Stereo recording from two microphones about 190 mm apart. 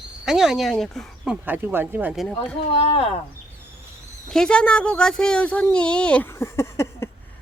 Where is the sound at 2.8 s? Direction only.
30° left (ahead or behind).